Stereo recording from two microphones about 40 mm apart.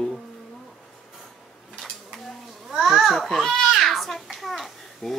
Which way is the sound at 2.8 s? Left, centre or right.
Centre.